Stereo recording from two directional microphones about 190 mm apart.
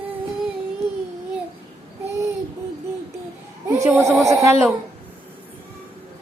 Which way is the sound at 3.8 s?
15° right (ahead or behind).